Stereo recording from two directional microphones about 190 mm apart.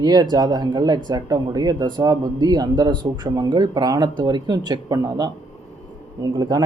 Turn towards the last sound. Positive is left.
turn(degrees=-20)  # may be behind; listen again after turning